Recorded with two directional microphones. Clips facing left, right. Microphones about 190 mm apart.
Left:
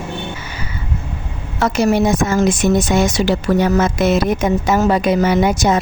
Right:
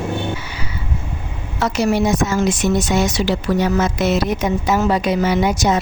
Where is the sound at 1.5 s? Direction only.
50° left (ahead or behind).